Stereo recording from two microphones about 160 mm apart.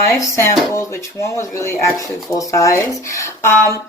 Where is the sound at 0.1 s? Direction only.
20° left (ahead or behind).